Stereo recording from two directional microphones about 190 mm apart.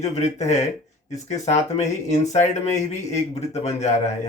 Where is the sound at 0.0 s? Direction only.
40° left (ahead or behind).